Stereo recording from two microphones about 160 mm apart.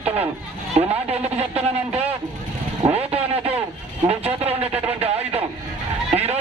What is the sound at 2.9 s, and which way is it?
Vehicle, 40° right (ahead or behind).